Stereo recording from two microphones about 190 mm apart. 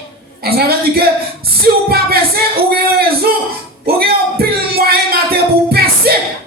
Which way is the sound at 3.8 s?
55° right (ahead or behind).